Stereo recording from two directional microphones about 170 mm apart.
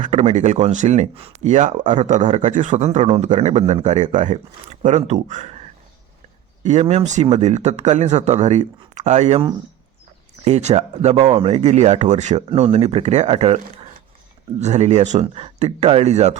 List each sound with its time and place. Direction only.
0.0 s speech: 45° right (ahead or behind)
10.4 s speech: 40° right (ahead or behind)
14.6 s speech: 40° right (ahead or behind)